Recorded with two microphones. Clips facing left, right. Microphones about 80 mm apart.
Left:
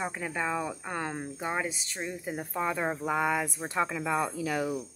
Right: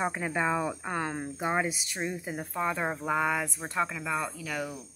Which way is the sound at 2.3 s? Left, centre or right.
Centre.